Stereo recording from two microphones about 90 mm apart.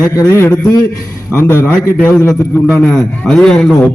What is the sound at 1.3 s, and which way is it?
Speech, 25° left (ahead or behind).